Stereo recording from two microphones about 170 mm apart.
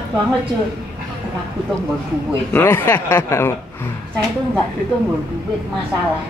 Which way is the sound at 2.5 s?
10° left (ahead or behind).